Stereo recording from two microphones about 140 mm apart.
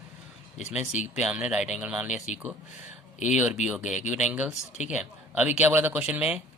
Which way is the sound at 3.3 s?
5° right (ahead or behind).